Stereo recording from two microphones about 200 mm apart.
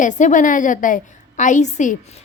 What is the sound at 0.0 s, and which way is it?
A woman's voice, 40° left (ahead or behind).